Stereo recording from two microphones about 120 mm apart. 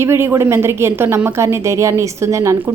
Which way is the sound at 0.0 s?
20° right (ahead or behind).